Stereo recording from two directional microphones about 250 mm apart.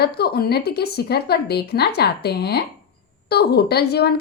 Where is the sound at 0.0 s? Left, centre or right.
Left.